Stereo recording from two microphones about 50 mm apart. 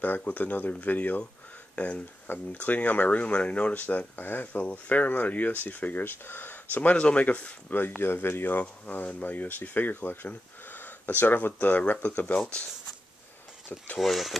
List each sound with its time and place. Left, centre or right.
0.0 s speech: left
4.5 s speech: left
7.7 s speech: left
13.9 s speech: centre